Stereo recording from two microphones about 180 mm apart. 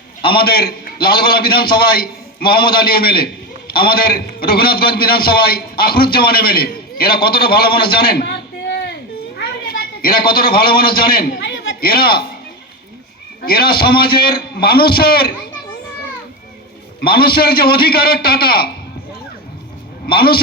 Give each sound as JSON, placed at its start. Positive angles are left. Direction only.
{"t": 0.3, "sound": "a man's voice", "side_deg": 60}
{"t": 9.4, "sound": "a man's voice", "side_deg": 55}
{"t": 11.3, "sound": "a sound", "side_deg": 90}
{"t": 13.4, "sound": "a man's voice", "side_deg": 55}
{"t": 17.0, "sound": "a man's voice", "side_deg": 60}
{"t": 20.1, "sound": "a man's voice", "side_deg": 60}